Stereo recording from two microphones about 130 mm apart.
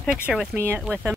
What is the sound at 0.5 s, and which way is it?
Speech, 20° right (ahead or behind).